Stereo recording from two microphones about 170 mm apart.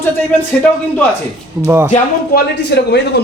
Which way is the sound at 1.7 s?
15° right (ahead or behind).